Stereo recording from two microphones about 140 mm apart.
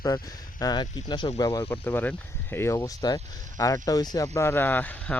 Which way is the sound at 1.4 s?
20° left (ahead or behind).